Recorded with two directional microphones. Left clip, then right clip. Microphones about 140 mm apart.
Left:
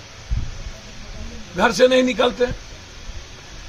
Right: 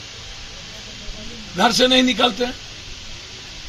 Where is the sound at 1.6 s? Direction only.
20° left (ahead or behind).